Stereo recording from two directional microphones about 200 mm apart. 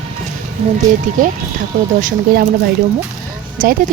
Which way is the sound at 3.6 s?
45° right (ahead or behind).